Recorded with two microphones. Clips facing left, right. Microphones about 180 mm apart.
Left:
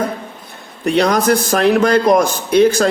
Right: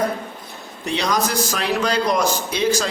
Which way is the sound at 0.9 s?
55° left (ahead or behind).